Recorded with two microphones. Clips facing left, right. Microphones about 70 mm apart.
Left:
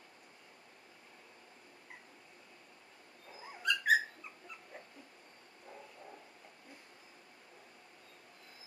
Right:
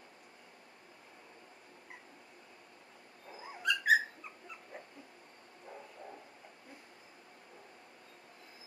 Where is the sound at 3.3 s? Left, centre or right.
Centre.